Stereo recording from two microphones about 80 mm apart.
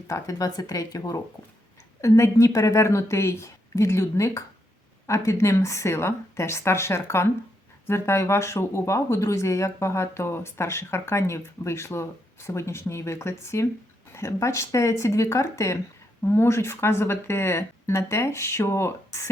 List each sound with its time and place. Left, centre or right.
0.1 s speech: left
2.0 s speech: left